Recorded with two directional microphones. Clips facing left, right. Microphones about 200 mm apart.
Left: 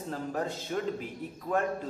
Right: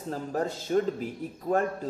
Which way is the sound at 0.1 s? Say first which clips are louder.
Right 3 dB; 40° right (ahead or behind).